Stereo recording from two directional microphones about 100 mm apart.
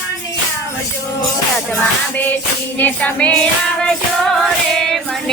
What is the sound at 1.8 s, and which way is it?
Music, 15° left (ahead or behind).